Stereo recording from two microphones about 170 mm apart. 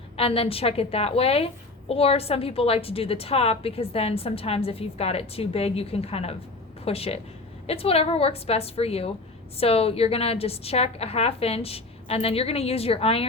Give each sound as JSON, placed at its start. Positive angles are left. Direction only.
{"t": 0.2, "sound": "a woman's voice", "side_deg": 35}